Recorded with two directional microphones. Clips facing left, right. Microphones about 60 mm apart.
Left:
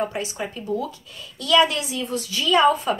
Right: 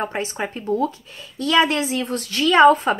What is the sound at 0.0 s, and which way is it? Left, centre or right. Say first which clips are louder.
Speech: right 2 dB; right.